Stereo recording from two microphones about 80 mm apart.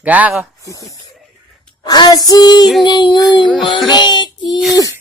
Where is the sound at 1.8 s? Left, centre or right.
Left.